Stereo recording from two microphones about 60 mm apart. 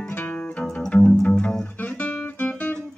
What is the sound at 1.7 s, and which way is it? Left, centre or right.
Guitar, left.